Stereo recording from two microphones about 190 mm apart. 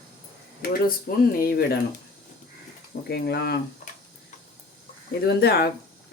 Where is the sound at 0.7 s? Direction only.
50° left (ahead or behind).